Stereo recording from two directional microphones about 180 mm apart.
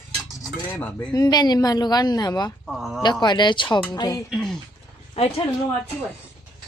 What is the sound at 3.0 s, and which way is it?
A woman's voice, 25° left (ahead or behind).